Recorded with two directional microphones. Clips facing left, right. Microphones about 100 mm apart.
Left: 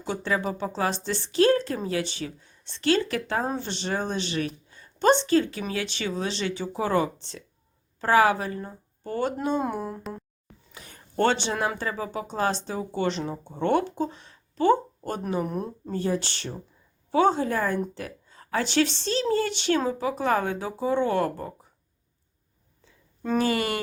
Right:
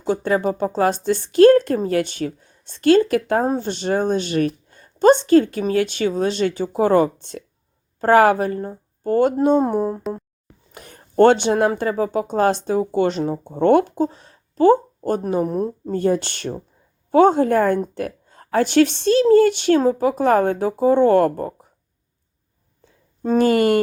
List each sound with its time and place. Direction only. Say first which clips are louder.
0.0 s a woman's voice: right 8 dB; 40° right (ahead or behind)
10.7 s a woman's voice: right 6 dB; 50° right (ahead or behind)
16.0 s a woman's voice: right 8 dB; 50° right (ahead or behind)
23.4 s a woman's voice: right 11 dB; 50° right (ahead or behind)